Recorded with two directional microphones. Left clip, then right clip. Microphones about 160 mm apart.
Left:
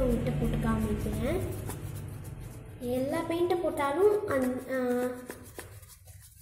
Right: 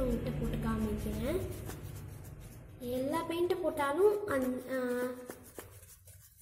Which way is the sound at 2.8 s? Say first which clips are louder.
Left 4 dB; 15° right (ahead or behind).